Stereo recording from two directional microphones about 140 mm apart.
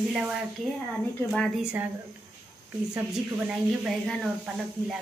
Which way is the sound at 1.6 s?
10° right (ahead or behind).